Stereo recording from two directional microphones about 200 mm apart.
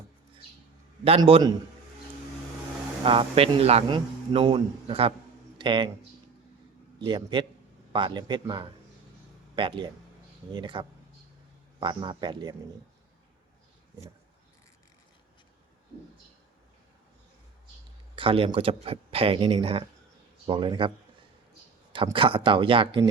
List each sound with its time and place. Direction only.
1.0 s a man's voice: 25° right (ahead or behind)
3.0 s a man's voice: 25° right (ahead or behind)
7.0 s a man's voice: 25° right (ahead or behind)
18.2 s a man's voice: 25° right (ahead or behind)